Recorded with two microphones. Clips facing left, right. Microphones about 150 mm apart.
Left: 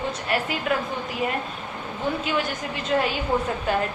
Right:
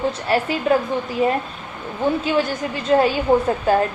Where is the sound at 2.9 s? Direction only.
35° right (ahead or behind).